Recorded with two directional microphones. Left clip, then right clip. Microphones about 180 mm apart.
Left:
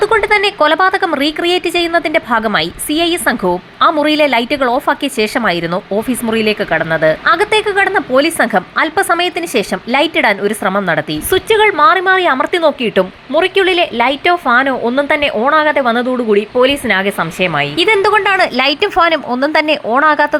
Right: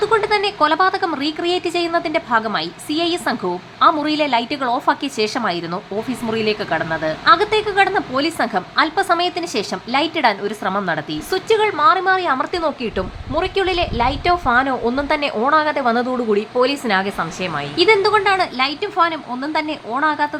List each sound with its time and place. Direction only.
0.0 s speech: 25° left (ahead or behind)